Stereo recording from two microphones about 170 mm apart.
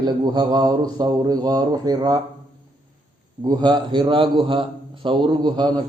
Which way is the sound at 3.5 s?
25° right (ahead or behind).